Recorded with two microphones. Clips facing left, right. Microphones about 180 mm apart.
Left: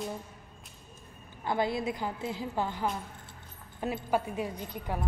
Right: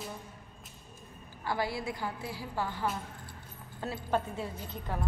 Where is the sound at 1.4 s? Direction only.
20° left (ahead or behind).